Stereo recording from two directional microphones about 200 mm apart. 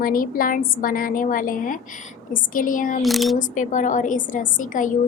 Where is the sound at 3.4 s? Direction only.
40° left (ahead or behind).